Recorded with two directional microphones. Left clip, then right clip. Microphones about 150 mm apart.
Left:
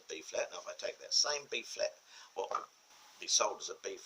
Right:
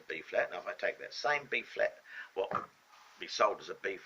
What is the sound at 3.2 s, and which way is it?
Speech, 50° left (ahead or behind).